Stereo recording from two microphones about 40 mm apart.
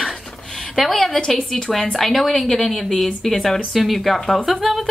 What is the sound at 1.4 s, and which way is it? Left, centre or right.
Speech, centre.